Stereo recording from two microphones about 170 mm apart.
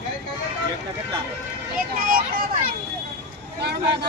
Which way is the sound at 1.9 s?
55° right (ahead or behind).